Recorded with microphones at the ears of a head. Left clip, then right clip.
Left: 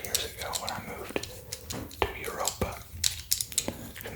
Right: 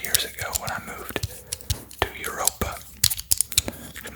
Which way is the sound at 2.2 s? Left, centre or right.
Right.